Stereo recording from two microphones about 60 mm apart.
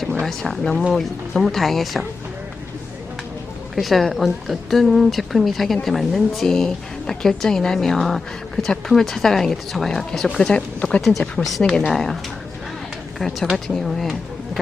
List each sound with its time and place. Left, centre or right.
0.3 s a woman's voice: centre
3.8 s a woman's voice: centre
11.4 s a woman's voice: centre
13.1 s a woman's voice: centre